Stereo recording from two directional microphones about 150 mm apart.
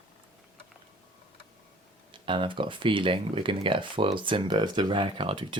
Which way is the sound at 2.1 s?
35° right (ahead or behind).